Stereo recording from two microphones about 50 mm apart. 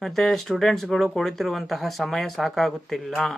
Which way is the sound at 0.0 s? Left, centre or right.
Centre.